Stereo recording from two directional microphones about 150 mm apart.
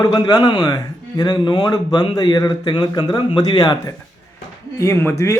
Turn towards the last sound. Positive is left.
turn(degrees=20)  # may be behind; listen again after turning